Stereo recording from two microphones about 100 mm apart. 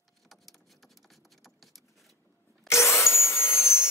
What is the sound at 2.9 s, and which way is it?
Vacuum cleaner, 25° left (ahead or behind).